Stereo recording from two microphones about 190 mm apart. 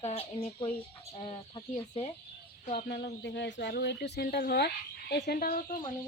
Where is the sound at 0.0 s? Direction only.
35° left (ahead or behind).